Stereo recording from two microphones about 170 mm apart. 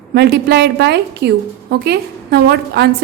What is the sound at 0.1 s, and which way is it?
A woman's voice, 75° right (ahead or behind).